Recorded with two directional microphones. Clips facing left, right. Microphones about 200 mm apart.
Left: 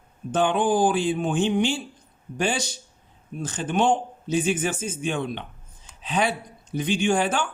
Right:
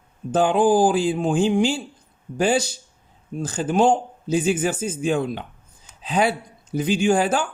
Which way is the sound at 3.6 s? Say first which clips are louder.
Right 4 dB; 25° right (ahead or behind).